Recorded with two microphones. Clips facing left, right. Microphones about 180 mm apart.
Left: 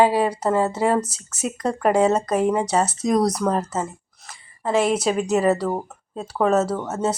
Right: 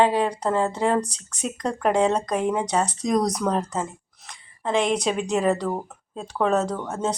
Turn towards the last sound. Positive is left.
turn(degrees=5)  # may be behind; listen again after turning